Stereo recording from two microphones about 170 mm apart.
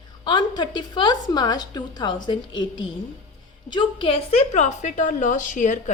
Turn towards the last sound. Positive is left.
turn(degrees=45)  # may be behind; listen again after turning